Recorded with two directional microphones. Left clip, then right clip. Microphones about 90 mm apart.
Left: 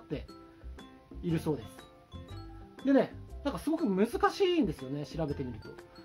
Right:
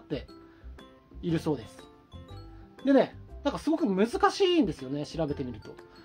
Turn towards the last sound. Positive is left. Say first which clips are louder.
# right 4 dB
turn(degrees=-35)  # may be behind; listen again after turning